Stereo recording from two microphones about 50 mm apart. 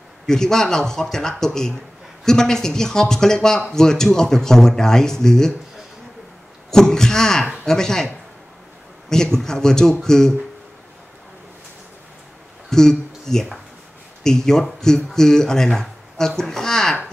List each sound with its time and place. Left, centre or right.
0.3 s speech: centre
6.7 s speech: centre
9.1 s speech: centre
12.6 s a sound: centre
14.2 s speech: centre